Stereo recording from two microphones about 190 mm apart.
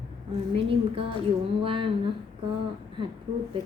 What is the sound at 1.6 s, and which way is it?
Speech, 25° right (ahead or behind).